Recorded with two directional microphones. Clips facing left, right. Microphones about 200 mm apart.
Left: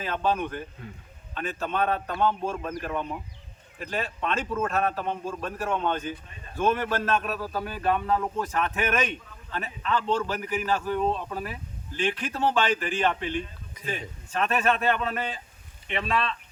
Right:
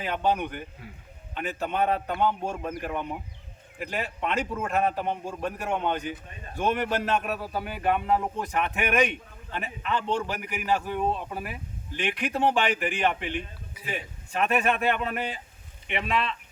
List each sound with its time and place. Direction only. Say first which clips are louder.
0.0 s a man's voice: even; 15° right (ahead or behind)